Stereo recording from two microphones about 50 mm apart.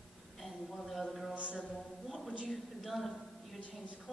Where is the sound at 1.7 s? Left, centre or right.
Centre.